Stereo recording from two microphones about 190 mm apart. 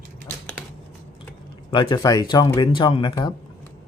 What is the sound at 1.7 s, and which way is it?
Speech, 20° left (ahead or behind).